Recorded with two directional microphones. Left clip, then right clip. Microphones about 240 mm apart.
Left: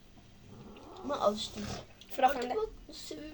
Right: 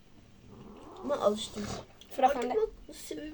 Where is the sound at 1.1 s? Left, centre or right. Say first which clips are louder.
Right 2 dB; centre.